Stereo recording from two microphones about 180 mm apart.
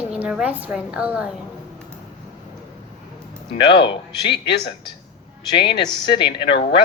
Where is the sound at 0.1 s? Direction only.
5° right (ahead or behind).